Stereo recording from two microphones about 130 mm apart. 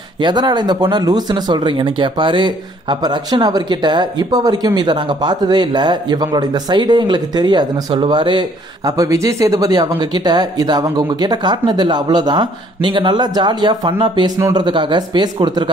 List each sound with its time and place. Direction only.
0.2 s speech: 35° right (ahead or behind)